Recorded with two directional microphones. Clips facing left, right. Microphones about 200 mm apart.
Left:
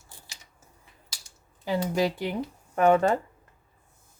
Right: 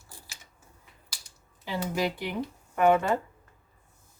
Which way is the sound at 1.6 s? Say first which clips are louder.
Left 4 dB; 40° left (ahead or behind).